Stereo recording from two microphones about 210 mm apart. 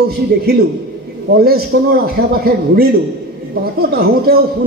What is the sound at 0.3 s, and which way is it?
A man's voice, 50° right (ahead or behind).